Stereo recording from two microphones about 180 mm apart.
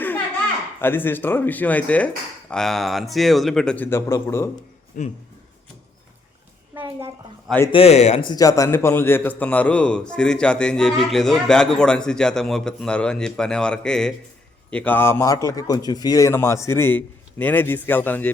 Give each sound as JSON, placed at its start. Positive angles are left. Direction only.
{"t": 0.8, "sound": "a man's voice", "side_deg": 10}
{"t": 4.9, "sound": "speech", "side_deg": 50}
{"t": 6.7, "sound": "a woman's voice", "side_deg": -15}
{"t": 7.7, "sound": "a man's voice", "side_deg": 35}